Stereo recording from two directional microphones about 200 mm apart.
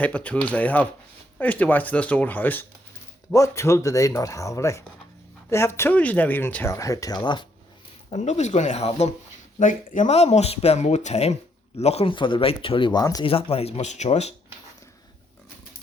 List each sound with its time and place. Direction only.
0.0 s speech: 5° left (ahead or behind)
8.1 s speech: 35° left (ahead or behind)